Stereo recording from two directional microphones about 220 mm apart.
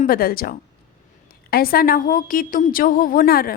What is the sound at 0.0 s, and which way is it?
A woman's voice, 40° left (ahead or behind).